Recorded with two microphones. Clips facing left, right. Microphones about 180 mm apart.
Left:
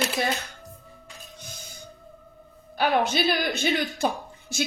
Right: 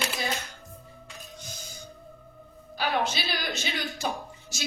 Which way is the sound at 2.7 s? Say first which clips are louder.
Left 5 dB; 55° left (ahead or behind).